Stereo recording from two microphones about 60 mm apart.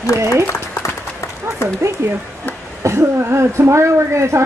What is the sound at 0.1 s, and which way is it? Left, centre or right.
Speech, right.